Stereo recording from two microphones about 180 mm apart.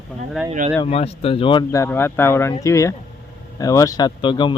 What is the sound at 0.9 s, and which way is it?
Speech, 35° left (ahead or behind).